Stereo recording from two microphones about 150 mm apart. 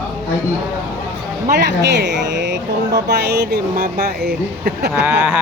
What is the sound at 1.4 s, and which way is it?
Speech, 90° right.